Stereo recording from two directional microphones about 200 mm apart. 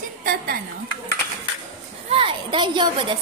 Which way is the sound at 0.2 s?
45° right (ahead or behind).